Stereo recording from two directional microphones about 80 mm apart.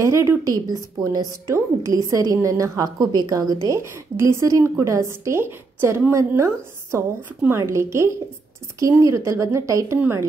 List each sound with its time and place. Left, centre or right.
0.0 s a woman's voice: right
1.5 s a woman's voice: right
3.6 s a woman's voice: right